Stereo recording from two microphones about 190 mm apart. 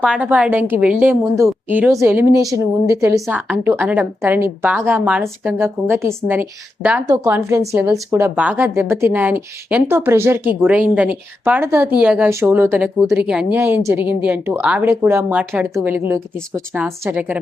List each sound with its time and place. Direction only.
0.0 s a woman's voice: 5° right (ahead or behind)
3.2 s a woman's voice: 5° right (ahead or behind)